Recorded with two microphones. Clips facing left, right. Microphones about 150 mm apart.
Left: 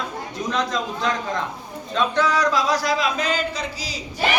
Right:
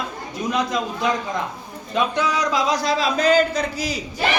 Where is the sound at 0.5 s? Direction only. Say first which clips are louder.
Right 1 dB; 10° right (ahead or behind).